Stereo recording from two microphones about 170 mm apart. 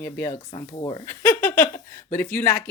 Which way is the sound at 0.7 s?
30° left (ahead or behind).